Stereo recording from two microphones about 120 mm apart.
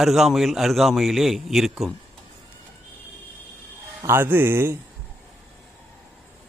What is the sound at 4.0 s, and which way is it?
Speech, 20° right (ahead or behind).